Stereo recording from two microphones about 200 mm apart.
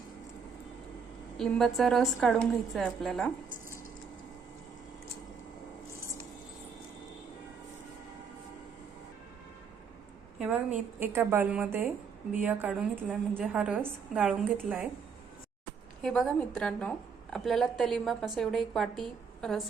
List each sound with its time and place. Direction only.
1.4 s a woman's voice: centre (ahead or behind)
10.3 s a woman's voice: 5° right (ahead or behind)
16.0 s a woman's voice: centre (ahead or behind)